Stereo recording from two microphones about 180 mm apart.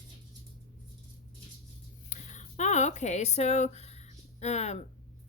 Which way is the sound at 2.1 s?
45° left (ahead or behind).